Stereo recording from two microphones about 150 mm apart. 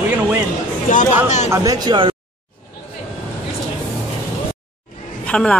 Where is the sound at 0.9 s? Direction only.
55° left (ahead or behind).